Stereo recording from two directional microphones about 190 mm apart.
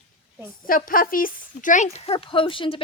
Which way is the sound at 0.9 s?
50° left (ahead or behind).